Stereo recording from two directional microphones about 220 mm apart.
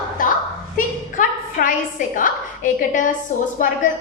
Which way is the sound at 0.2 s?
40° left (ahead or behind).